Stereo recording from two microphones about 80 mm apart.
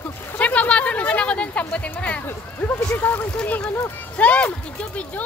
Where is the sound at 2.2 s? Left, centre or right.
Left.